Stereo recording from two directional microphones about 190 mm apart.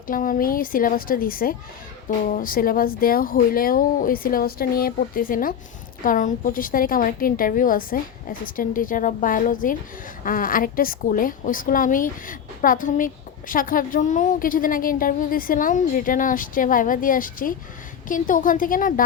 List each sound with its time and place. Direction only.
0.1 s a woman's voice: 45° left (ahead or behind)